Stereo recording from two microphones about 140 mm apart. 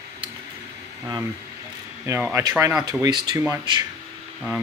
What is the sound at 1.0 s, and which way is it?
Speech, 20° right (ahead or behind).